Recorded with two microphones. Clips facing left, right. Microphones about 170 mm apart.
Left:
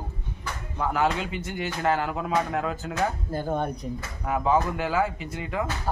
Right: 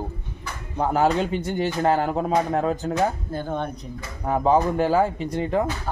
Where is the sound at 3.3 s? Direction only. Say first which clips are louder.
Even; 10° left (ahead or behind).